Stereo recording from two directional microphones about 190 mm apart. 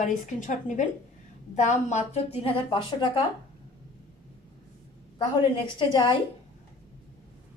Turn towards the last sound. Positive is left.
turn(degrees=25)  # may be behind; listen again after turning